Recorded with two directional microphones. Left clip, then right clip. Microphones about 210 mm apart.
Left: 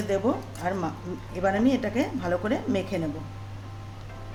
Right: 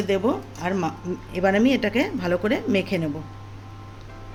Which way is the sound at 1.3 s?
40° right (ahead or behind).